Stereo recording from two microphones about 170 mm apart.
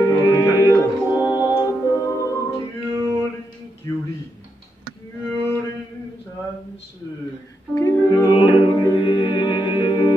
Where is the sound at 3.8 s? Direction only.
20° left (ahead or behind).